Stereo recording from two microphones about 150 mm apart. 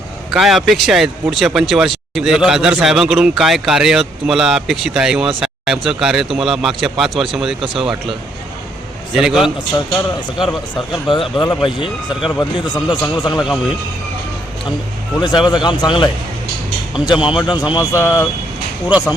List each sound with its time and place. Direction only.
0.3 s speech: centre (ahead or behind)
9.1 s speech: 5° right (ahead or behind)
10.9 s a man's voice: 35° left (ahead or behind)
13.4 s speech: 5° right (ahead or behind)
15.4 s speech: 30° left (ahead or behind)
17.2 s a man's voice: 30° left (ahead or behind)
18.9 s speech: 5° right (ahead or behind)